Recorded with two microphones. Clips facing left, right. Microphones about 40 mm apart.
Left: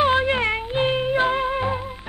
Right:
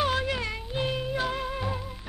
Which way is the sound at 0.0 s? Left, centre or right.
Left.